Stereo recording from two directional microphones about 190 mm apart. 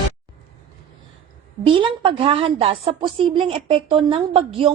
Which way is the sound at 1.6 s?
25° right (ahead or behind).